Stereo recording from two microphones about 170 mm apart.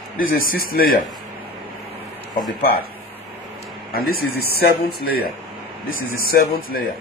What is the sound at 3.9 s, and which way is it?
Speech, 65° left (ahead or behind).